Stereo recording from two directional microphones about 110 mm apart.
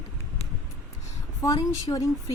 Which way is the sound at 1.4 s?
35° left (ahead or behind).